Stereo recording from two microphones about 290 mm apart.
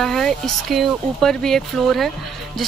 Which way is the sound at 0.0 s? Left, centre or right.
Centre.